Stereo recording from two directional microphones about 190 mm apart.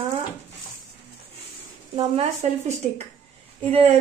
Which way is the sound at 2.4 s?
40° right (ahead or behind).